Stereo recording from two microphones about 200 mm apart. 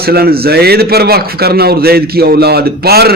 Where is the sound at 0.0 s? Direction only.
50° right (ahead or behind).